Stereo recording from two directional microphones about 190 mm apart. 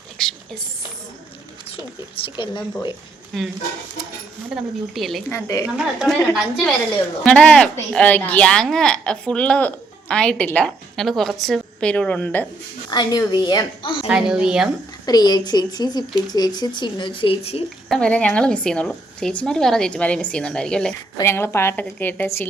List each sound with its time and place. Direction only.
0.2 s a sound: 5° left (ahead or behind)
2.2 s speech: 25° left (ahead or behind)
3.3 s a woman's voice: centre (ahead or behind)
5.3 s a woman's voice: 15° left (ahead or behind)
5.6 s a woman's voice: 5° right (ahead or behind)
12.9 s speech: 20° left (ahead or behind)
14.1 s a woman's voice: 5° right (ahead or behind)
15.0 s speech: 20° left (ahead or behind)
17.8 s a woman's voice: 5° left (ahead or behind)